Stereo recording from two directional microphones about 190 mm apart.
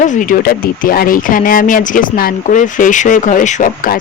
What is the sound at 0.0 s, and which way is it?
Speech, 40° left (ahead or behind).